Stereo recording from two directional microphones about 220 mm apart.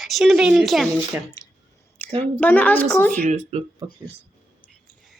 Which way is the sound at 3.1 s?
35° right (ahead or behind).